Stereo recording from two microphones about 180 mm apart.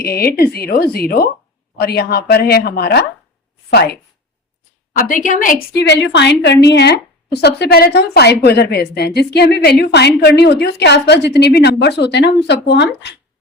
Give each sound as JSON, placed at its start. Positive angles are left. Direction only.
{"t": 0.0, "sound": "speech", "side_deg": 60}
{"t": 4.9, "sound": "a woman's voice", "side_deg": 45}